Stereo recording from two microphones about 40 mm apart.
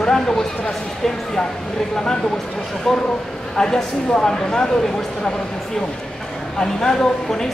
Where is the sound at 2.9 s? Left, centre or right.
Centre.